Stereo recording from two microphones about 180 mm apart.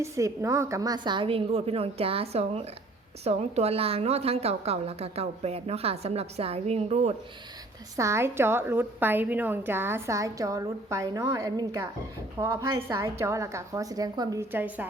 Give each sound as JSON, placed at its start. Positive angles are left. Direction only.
{"t": 0.0, "sound": "a woman's voice", "side_deg": -15}
{"t": 7.9, "sound": "a woman's voice", "side_deg": -15}